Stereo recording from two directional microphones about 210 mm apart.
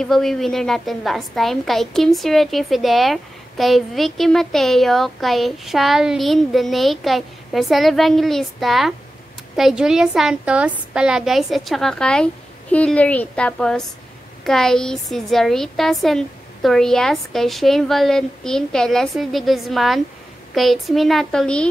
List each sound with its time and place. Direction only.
0.0 s a woman's voice: centre (ahead or behind)